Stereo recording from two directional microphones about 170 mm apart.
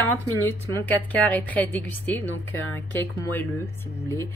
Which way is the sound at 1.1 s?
10° left (ahead or behind).